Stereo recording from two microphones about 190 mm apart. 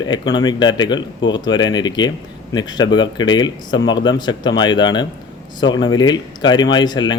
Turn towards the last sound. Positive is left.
turn(degrees=25)  # may be behind; listen again after turning